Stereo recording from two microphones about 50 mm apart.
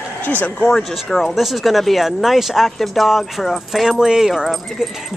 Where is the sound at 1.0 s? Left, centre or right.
Centre.